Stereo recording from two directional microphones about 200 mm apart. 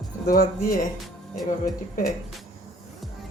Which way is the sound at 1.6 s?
45° left (ahead or behind).